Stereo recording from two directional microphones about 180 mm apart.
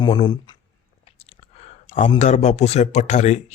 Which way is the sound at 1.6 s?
40° left (ahead or behind).